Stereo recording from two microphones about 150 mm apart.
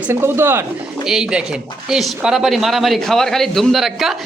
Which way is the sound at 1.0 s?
5° right (ahead or behind).